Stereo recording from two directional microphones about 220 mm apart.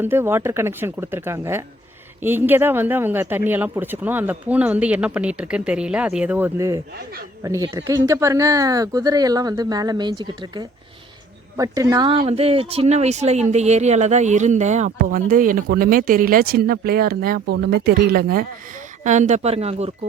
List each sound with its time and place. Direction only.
0.0 s speech: 10° right (ahead or behind); by 19.9 s 30° right (ahead or behind)